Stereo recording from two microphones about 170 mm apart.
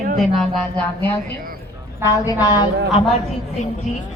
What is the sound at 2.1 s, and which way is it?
Speech, 20° left (ahead or behind).